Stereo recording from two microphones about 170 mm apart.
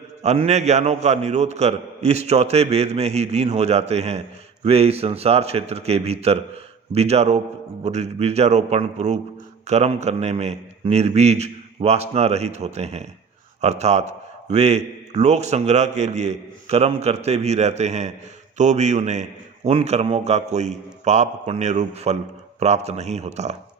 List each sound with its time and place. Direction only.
0.2 s a man's voice: 40° right (ahead or behind)